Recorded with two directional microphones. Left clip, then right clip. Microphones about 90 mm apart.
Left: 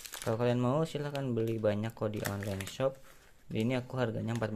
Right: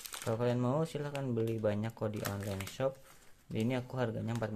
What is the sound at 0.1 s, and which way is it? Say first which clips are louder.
Speech: left 3 dB; 20° left (ahead or behind).